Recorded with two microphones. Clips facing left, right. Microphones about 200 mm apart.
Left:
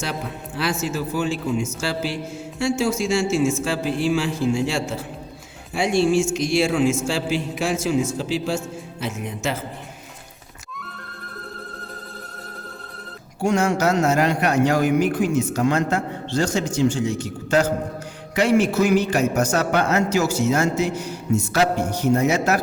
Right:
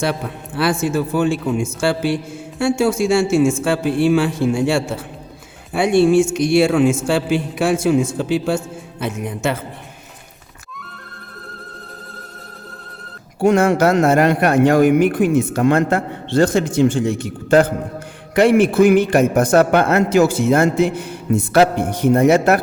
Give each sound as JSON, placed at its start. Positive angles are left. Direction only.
{"t": 0.0, "sound": "a man's voice", "side_deg": -55}
{"t": 13.4, "sound": "a man's voice", "side_deg": -55}